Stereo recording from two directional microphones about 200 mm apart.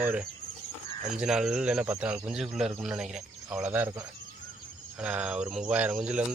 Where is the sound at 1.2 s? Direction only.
5° right (ahead or behind).